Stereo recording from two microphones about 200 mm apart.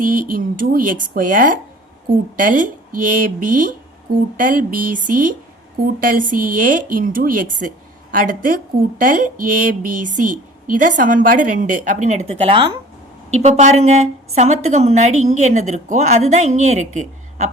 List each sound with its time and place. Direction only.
0.0 s a woman's voice: 45° right (ahead or behind)